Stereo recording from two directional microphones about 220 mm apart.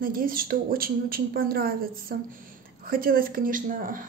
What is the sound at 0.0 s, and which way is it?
Speech, 40° right (ahead or behind).